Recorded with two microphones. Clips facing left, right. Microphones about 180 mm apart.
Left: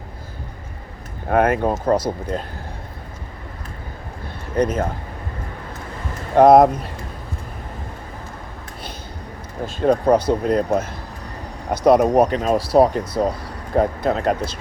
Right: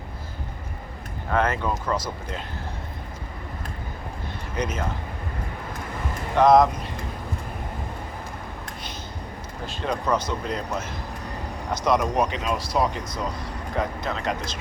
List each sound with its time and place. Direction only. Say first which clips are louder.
1.3 s speech: left 7 dB; 55° left (ahead or behind)
4.5 s speech: left 9 dB; 55° left (ahead or behind)
6.3 s speech: left 6 dB; 60° left (ahead or behind)
9.6 s speech: left 10 dB; 50° left (ahead or behind)
12.7 s speech: left 12 dB; 60° left (ahead or behind)